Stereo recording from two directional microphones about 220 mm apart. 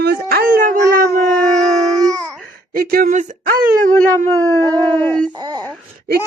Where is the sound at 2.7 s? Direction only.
40° right (ahead or behind).